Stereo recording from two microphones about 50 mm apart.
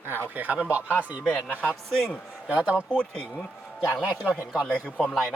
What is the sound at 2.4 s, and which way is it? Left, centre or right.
Speech, right.